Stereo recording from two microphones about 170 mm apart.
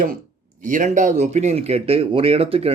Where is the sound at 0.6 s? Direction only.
45° right (ahead or behind).